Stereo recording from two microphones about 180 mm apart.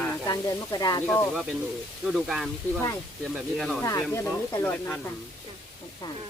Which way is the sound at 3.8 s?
15° left (ahead or behind).